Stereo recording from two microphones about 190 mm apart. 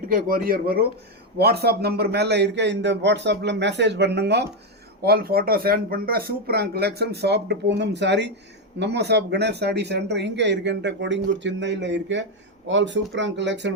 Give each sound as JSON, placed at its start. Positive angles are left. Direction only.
{"t": 0.1, "sound": "speech", "side_deg": -50}